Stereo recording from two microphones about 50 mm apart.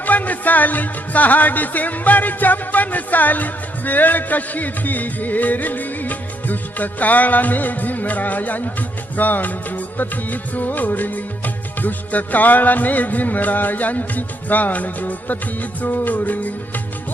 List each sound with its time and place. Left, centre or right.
0.0 s music: left